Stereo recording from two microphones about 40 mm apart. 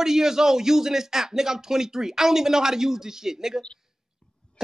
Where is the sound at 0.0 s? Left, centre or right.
Centre.